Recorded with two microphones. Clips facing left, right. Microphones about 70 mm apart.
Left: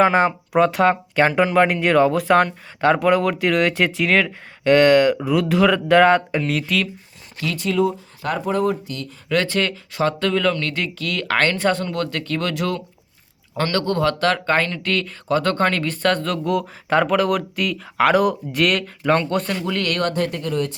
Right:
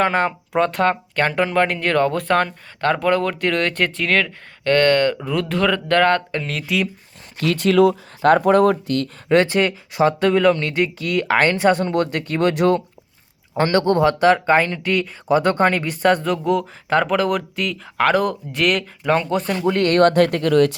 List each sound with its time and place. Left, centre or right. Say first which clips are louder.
0.0 s speech: left 3 dB; centre
6.4 s speech: left 3 dB; centre
7.4 s speech: right 5 dB; right
9.3 s speech: right 4 dB; right; by 19.5 s centre
19.6 s speech: right 6 dB; right
20.0 s speech: right 8 dB; right